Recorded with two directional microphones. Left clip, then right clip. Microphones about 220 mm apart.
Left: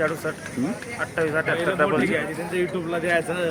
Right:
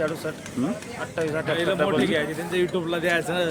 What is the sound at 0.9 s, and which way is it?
Speech, centre (ahead or behind).